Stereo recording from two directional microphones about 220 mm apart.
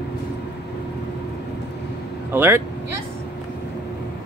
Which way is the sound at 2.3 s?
10° right (ahead or behind).